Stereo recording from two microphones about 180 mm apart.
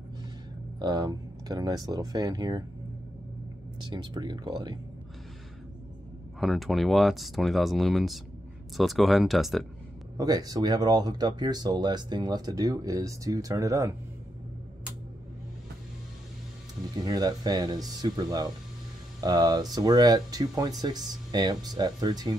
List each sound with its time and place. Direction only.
0.7 s speech: 25° right (ahead or behind)
3.9 s speech: 25° right (ahead or behind)
6.4 s speech: centre (ahead or behind)
10.1 s speech: 20° right (ahead or behind)
16.9 s speech: 20° right (ahead or behind)